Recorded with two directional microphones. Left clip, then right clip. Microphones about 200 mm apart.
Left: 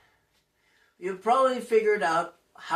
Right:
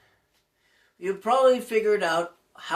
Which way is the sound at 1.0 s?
50° right (ahead or behind).